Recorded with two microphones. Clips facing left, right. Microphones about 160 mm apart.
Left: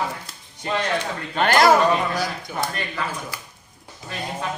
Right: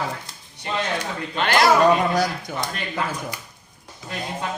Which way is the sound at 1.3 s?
45° left (ahead or behind).